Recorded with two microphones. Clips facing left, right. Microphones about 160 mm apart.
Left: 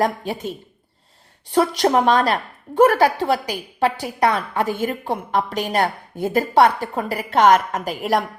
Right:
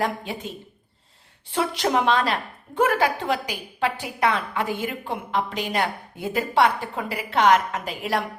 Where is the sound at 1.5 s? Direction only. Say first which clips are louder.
Left 6 dB; 40° left (ahead or behind).